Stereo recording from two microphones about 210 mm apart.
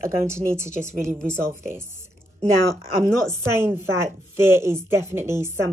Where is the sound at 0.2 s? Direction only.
10° right (ahead or behind).